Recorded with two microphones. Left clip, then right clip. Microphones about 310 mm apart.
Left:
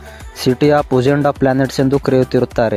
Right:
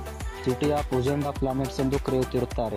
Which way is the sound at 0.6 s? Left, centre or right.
Left.